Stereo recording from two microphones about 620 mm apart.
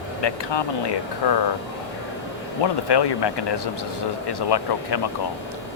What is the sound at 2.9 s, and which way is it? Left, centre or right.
Speech, left.